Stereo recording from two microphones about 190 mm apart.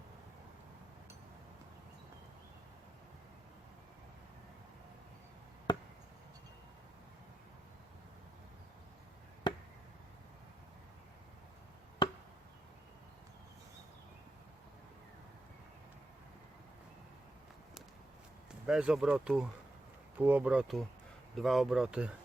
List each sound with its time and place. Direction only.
5.7 s chop: 20° left (ahead or behind)
9.5 s chop: 20° left (ahead or behind)
12.0 s chop: 25° left (ahead or behind)
18.6 s speech: 5° right (ahead or behind)